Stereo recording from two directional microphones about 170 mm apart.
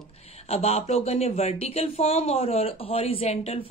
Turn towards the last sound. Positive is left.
turn(degrees=35)  # may be behind; listen again after turning